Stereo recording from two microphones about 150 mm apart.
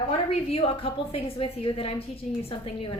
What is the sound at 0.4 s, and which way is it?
A woman's voice, 40° left (ahead or behind).